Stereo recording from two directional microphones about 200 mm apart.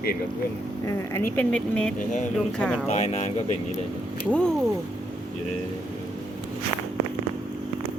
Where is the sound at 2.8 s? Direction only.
35° left (ahead or behind).